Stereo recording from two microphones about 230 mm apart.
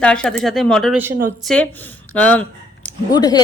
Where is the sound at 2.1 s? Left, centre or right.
Centre.